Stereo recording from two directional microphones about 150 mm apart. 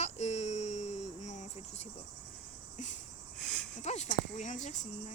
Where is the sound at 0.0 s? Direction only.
50° left (ahead or behind).